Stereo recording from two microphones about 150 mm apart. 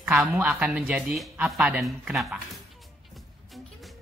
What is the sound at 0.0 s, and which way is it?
Speech, 5° right (ahead or behind).